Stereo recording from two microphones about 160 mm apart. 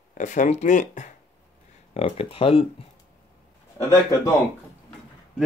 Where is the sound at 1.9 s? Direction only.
35° left (ahead or behind).